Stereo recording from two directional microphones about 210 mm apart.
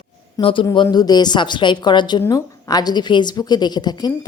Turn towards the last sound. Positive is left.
turn(degrees=20)  # may be behind; listen again after turning